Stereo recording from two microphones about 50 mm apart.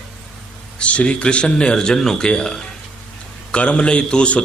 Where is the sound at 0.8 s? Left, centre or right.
Left.